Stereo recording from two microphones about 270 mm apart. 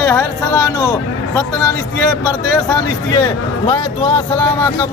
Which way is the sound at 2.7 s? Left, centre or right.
Centre.